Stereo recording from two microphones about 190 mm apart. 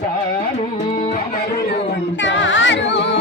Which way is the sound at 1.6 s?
65° left (ahead or behind).